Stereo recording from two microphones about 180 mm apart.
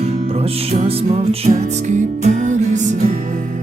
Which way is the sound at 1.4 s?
40° right (ahead or behind).